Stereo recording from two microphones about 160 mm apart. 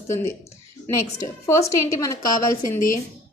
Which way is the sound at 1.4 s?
20° left (ahead or behind).